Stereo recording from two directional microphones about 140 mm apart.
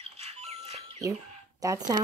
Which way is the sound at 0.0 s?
50° right (ahead or behind).